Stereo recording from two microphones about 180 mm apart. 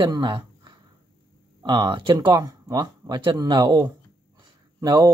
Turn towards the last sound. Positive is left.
turn(degrees=-25)  # may be behind; listen again after turning